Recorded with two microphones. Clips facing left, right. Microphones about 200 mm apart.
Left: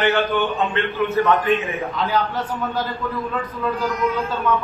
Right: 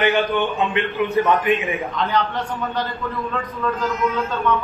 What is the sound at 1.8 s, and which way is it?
Speech, centre (ahead or behind).